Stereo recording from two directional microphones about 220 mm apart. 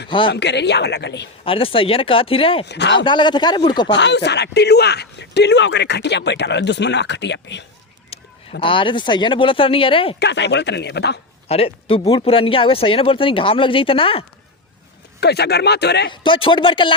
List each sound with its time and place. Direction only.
0.1 s speech: 20° left (ahead or behind)
0.3 s speech: 50° left (ahead or behind)
1.5 s speech: 25° left (ahead or behind)
2.6 s speech: 50° left (ahead or behind)
3.0 s speech: 20° left (ahead or behind)
3.9 s speech: 50° left (ahead or behind)
8.1 s honk: 25° left (ahead or behind)
8.6 s speech: 20° left (ahead or behind)
10.2 s speech: 50° left (ahead or behind)
11.4 s speech: 25° left (ahead or behind)
15.2 s speech: 50° left (ahead or behind)
16.2 s speech: 25° left (ahead or behind)